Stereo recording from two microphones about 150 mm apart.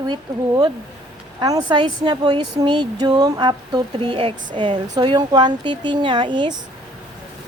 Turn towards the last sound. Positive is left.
turn(degrees=-30)  # may be behind; listen again after turning